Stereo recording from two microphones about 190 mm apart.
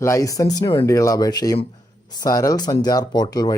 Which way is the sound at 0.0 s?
15° left (ahead or behind).